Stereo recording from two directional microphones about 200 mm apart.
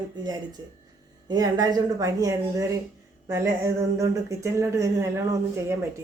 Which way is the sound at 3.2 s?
15° right (ahead or behind).